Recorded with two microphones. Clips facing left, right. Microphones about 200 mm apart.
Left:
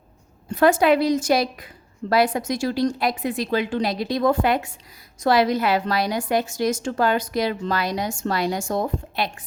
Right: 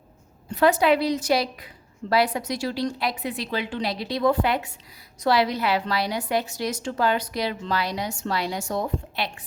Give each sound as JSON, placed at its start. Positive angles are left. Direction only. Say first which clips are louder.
{"t": 0.5, "sound": "a woman's voice", "louder": "left 3 dB", "side_deg": 50}